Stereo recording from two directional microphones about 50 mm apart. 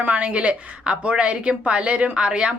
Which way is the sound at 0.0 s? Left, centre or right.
Right.